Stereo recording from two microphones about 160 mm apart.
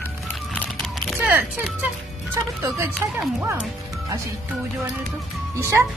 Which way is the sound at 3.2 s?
10° right (ahead or behind).